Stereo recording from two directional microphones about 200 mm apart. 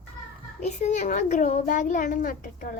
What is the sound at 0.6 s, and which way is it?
A child's voice, 35° left (ahead or behind).